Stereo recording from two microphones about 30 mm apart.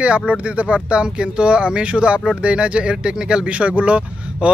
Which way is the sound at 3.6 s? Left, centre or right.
Right.